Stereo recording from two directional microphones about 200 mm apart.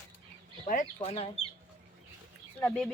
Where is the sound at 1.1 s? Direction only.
30° left (ahead or behind).